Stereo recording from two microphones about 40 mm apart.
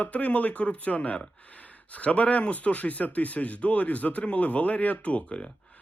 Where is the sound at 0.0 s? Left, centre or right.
Left.